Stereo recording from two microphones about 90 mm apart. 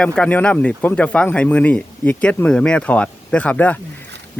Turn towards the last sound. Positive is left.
turn(degrees=20)  # may be behind; listen again after turning